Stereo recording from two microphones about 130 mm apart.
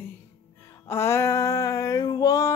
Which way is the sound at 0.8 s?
20° left (ahead or behind).